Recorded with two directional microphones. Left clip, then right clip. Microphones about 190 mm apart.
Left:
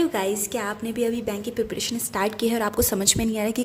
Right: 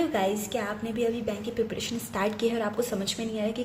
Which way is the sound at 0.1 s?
25° left (ahead or behind).